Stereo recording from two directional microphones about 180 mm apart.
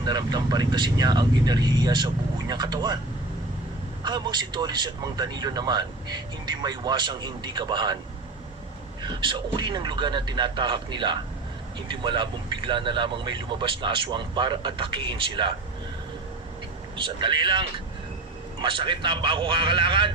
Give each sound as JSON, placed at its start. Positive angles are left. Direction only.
{"t": 0.0, "sound": "speech", "side_deg": -25}
{"t": 4.0, "sound": "speech", "side_deg": -25}
{"t": 9.0, "sound": "speech", "side_deg": -25}
{"t": 17.0, "sound": "speech", "side_deg": -25}